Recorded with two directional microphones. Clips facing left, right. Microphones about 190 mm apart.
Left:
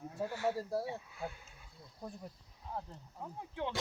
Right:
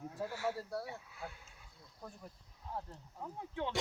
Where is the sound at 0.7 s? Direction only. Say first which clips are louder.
Left 5 dB; 25° left (ahead or behind).